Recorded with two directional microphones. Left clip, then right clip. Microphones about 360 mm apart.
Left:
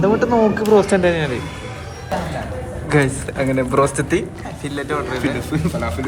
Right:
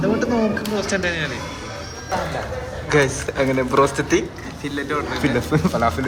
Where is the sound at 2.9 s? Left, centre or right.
Centre.